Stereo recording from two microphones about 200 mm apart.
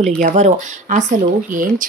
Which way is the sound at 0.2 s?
35° right (ahead or behind).